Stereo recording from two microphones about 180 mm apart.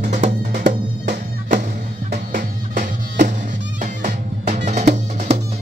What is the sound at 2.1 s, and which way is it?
Music, 55° right (ahead or behind).